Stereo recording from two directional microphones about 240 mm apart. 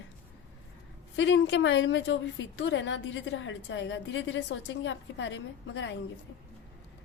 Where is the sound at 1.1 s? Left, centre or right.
Left.